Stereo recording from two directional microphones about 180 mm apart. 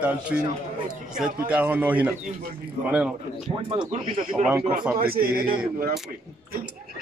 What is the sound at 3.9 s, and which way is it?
Speech, 40° right (ahead or behind).